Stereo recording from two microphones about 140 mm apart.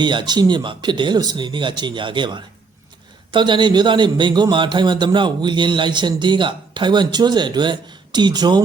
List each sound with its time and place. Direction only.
0.0 s a man's voice: 35° right (ahead or behind)